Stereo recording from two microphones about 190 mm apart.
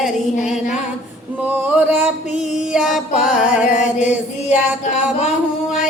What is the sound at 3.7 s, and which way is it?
Music, 40° left (ahead or behind).